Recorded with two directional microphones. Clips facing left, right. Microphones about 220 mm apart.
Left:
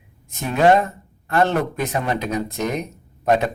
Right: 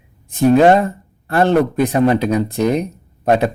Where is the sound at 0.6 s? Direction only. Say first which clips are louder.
Right 4 dB; 35° right (ahead or behind).